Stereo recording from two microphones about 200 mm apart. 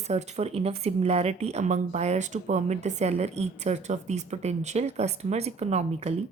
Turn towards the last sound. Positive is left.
turn(degrees=-30)  # may be behind; listen again after turning